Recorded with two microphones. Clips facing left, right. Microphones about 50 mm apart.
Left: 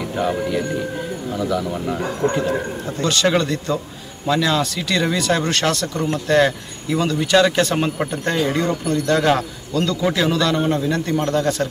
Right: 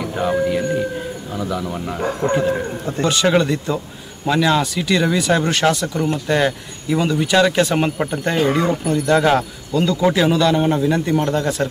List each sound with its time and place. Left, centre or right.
0.0 s music: centre
1.4 s speech: centre
2.2 s speech: right
3.1 s speech: centre